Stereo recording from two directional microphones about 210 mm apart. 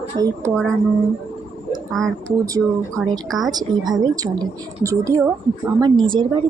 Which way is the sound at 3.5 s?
20° right (ahead or behind).